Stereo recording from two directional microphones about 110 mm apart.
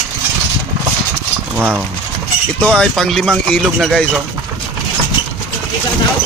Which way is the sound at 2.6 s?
5° left (ahead or behind).